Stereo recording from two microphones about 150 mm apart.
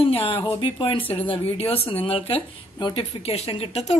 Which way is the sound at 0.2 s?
35° left (ahead or behind).